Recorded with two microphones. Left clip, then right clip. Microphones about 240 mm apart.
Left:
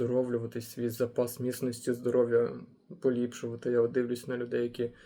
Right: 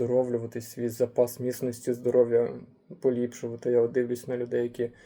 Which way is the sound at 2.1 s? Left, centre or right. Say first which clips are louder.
Right 4 dB; right.